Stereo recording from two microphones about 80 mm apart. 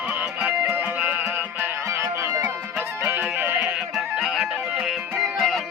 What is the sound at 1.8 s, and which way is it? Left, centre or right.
Music, right.